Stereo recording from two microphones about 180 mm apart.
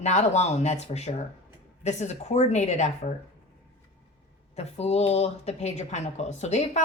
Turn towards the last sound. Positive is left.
turn(degrees=40)  # may be behind; listen again after turning